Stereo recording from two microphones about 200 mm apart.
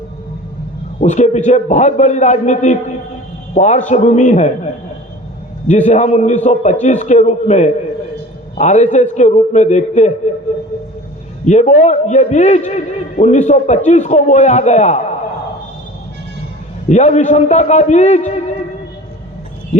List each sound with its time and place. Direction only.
1.0 s a man's voice: 35° left (ahead or behind)
11.4 s a man's voice: 35° left (ahead or behind)
16.9 s a man's voice: 35° left (ahead or behind)